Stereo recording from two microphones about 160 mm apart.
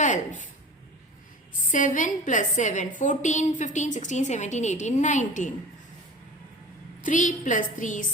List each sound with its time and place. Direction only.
0.0 s speech: 50° left (ahead or behind)
1.7 s a woman's voice: 55° left (ahead or behind)
7.0 s a woman's voice: 55° left (ahead or behind)